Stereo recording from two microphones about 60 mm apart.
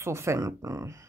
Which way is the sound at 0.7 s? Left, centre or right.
Right.